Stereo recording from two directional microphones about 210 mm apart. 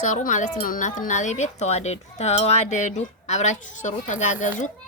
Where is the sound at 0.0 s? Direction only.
35° left (ahead or behind).